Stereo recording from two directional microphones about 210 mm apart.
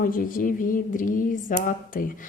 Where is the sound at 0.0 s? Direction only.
40° left (ahead or behind).